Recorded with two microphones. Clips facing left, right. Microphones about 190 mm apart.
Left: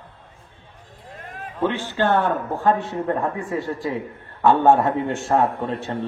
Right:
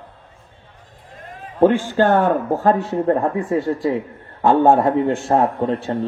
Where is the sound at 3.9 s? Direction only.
30° right (ahead or behind).